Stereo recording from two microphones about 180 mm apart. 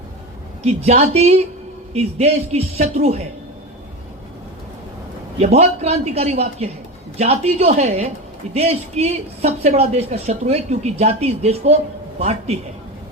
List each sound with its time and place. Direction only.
0.6 s speech: 35° right (ahead or behind)
5.4 s speech: 35° right (ahead or behind)